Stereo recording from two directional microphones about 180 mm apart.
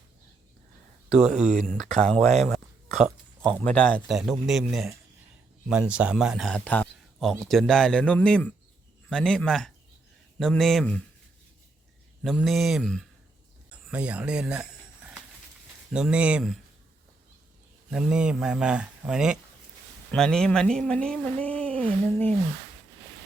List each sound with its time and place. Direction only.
1.3 s speech: 40° right (ahead or behind)
1.6 s speech: 5° left (ahead or behind)
2.1 s speech: 35° right (ahead or behind)
2.5 s a sound: centre (ahead or behind)
3.6 s speech: 5° left (ahead or behind)
12.2 s speech: centre (ahead or behind)
13.7 s a sound: 5° right (ahead or behind)
15.9 s speech: 5° right (ahead or behind)
17.9 s speech: 5° right (ahead or behind)